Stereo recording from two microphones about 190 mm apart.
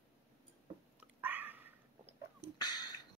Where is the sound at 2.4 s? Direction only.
20° left (ahead or behind).